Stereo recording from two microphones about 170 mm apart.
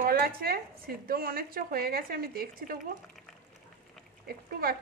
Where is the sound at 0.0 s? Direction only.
60° right (ahead or behind).